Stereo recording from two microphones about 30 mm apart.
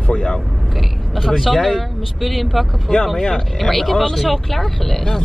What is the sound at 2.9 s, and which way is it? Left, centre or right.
Speech, left.